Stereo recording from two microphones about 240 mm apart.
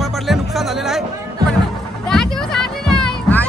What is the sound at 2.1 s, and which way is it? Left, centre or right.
Music, centre.